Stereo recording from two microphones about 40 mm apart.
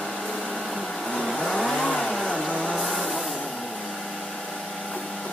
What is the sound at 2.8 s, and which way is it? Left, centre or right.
Vehicle, centre.